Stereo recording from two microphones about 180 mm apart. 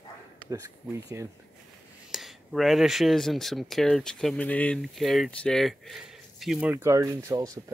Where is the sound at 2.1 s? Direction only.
Centre (ahead or behind).